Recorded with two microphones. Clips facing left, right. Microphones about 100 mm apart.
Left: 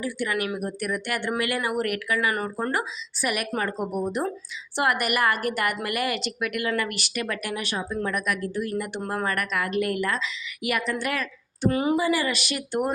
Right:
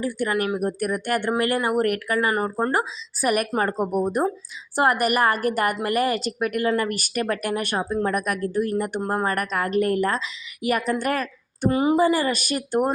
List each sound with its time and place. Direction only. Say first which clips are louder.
0.0 s a woman's voice: right 4 dB; 40° right (ahead or behind)
2.3 s a woman's voice: right 4 dB; 30° right (ahead or behind); by 7.9 s 50° right (ahead or behind)
7.9 s a woman's voice: right 3 dB; 40° right (ahead or behind)
9.0 s a woman's voice: right 4 dB; 30° right (ahead or behind)
11.7 s speech: right 4 dB; 25° right (ahead or behind)
11.9 s a woman's voice: right 4 dB; 40° right (ahead or behind)